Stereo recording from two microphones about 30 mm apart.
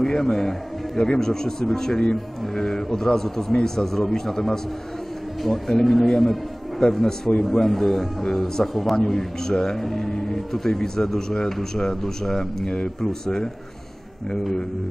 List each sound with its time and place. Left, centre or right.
0.2 s a man's voice: centre
5.7 s a man's voice: centre
12.6 s a man's voice: left